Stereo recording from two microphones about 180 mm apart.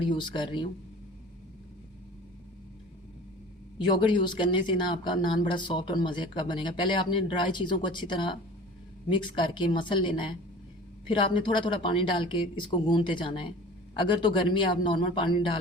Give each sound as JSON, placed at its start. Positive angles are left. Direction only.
{"t": 0.0, "sound": "speech", "side_deg": 25}
{"t": 3.8, "sound": "speech", "side_deg": 25}